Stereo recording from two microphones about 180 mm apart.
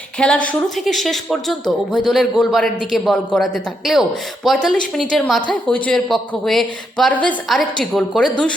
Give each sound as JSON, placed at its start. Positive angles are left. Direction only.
{"t": 0.2, "sound": "a woman's voice", "side_deg": 5}